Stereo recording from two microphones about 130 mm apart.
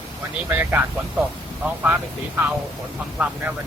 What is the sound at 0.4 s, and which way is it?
Speech, 15° right (ahead or behind).